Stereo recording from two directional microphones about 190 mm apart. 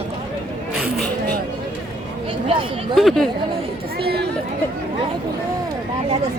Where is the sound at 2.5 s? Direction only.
30° right (ahead or behind).